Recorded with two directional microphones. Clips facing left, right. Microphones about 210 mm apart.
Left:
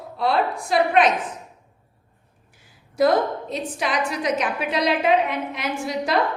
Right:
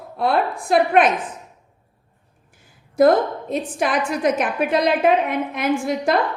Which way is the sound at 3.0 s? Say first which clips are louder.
Right 4 dB; 50° right (ahead or behind).